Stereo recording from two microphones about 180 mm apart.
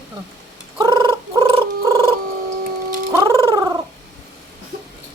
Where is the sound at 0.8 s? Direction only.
25° right (ahead or behind).